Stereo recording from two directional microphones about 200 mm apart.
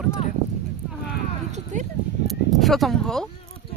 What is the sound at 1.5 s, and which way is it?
Speech, 35° right (ahead or behind).